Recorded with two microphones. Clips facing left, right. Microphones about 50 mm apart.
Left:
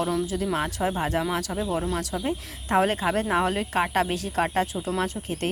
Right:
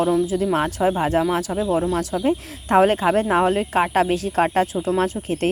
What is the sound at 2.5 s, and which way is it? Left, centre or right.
Speech, right.